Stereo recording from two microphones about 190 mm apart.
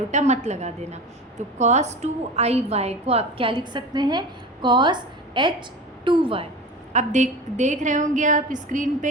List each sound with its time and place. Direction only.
0.1 s a woman's voice: 35° right (ahead or behind)
6.9 s a woman's voice: 40° right (ahead or behind)